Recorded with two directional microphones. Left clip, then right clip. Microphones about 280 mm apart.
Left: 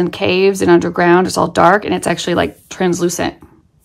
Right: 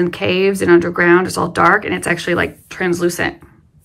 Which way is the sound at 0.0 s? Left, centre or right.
Centre.